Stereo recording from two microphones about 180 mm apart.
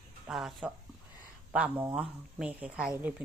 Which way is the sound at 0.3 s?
Centre (ahead or behind).